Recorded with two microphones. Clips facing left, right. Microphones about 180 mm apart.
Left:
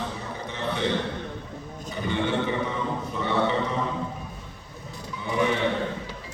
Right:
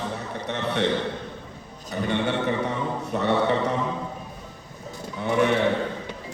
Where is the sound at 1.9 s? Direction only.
70° right (ahead or behind).